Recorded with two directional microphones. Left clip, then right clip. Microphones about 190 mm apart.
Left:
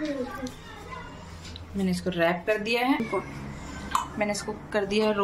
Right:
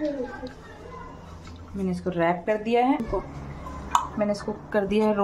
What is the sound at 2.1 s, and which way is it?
Speech, 35° right (ahead or behind).